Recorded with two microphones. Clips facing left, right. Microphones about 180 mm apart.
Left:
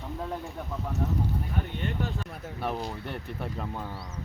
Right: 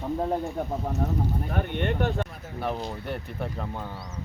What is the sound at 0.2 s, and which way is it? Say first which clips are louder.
Speech: right 6 dB; 45° right (ahead or behind).